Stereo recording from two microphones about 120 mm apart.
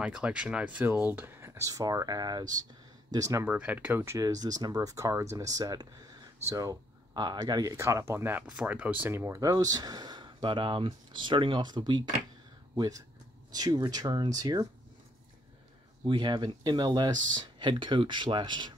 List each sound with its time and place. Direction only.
0.0 s speech: 10° right (ahead or behind); by 3.4 s 25° right (ahead or behind)
3.4 s speech: 15° right (ahead or behind); by 14.7 s 30° right (ahead or behind)
16.1 s speech: 40° right (ahead or behind)